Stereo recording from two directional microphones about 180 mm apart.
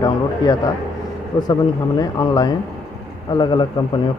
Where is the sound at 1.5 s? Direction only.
25° left (ahead or behind).